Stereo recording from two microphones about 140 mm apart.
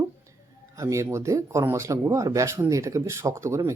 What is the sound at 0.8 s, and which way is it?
Speech, 20° right (ahead or behind).